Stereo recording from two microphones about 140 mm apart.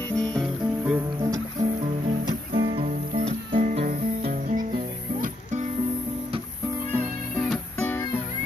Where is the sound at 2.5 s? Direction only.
45° right (ahead or behind).